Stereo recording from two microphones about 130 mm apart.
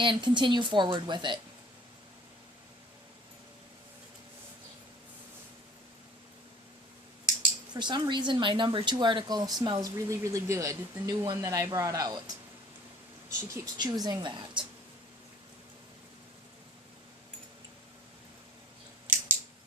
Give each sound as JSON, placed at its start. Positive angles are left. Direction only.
{"t": 0.0, "sound": "speech", "side_deg": -35}
{"t": 7.7, "sound": "speech", "side_deg": -35}
{"t": 13.5, "sound": "speech", "side_deg": -35}